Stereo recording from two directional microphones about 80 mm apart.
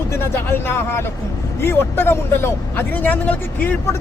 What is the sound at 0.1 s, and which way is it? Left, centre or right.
Speech, left.